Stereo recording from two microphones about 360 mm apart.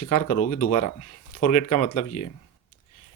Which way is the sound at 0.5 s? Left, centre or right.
Left.